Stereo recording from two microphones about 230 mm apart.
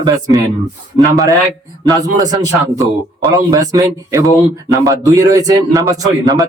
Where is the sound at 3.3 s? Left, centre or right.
Centre.